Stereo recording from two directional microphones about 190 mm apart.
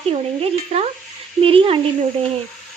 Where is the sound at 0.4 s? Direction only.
30° right (ahead or behind).